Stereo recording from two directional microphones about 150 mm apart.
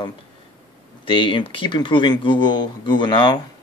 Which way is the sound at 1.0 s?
35° left (ahead or behind).